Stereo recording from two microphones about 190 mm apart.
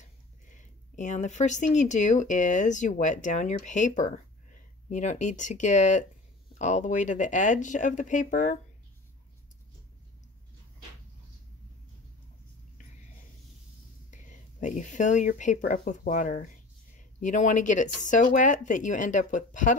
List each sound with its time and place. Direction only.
0.0 s speech: 40° left (ahead or behind)
14.1 s speech: 40° left (ahead or behind)